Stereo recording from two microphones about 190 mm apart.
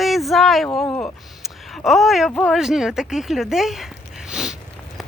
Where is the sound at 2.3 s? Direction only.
5° left (ahead or behind).